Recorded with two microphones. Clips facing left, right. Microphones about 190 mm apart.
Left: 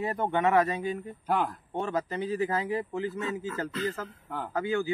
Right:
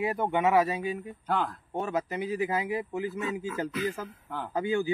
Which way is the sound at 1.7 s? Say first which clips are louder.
Even; 5° right (ahead or behind).